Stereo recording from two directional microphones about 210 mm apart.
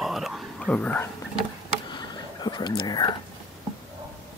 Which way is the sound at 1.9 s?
20° left (ahead or behind).